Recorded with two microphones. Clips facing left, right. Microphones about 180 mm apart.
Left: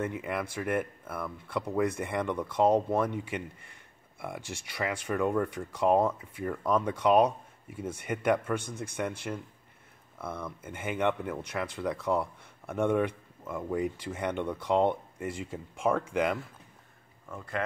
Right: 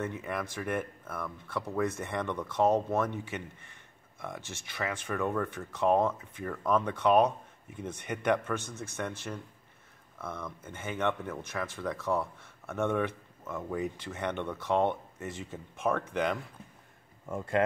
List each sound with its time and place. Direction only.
0.0 s speech: 10° left (ahead or behind)
17.3 s speech: 25° right (ahead or behind)